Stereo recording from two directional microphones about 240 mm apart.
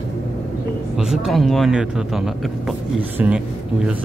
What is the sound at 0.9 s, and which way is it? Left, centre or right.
Speech, centre.